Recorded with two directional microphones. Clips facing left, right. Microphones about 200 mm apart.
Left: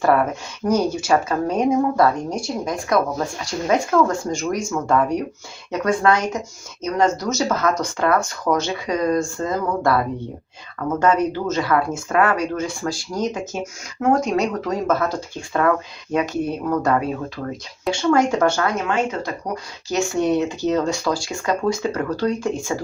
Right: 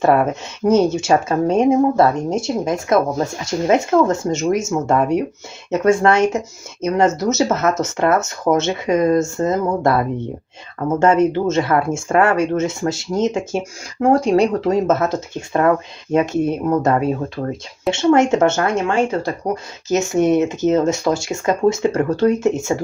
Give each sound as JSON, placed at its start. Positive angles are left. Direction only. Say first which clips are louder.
{"t": 0.0, "sound": "speech", "louder": "right 3 dB", "side_deg": -25}